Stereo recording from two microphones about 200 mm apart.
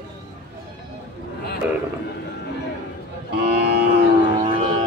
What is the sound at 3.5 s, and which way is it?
Cattle, 55° right (ahead or behind).